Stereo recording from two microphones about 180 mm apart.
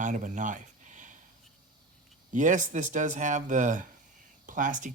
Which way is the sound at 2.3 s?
45° right (ahead or behind).